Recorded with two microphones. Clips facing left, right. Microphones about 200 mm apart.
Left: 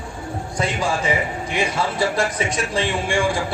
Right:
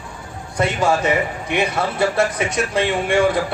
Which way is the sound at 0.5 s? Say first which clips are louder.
Right 5 dB; 55° right (ahead or behind).